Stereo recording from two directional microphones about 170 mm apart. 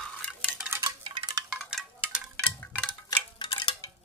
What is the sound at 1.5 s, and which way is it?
Wind chime, centre (ahead or behind).